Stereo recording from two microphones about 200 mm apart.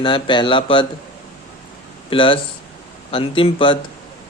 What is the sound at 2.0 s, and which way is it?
A man's voice, 25° left (ahead or behind).